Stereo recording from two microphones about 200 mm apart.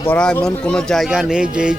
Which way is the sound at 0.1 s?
5° left (ahead or behind).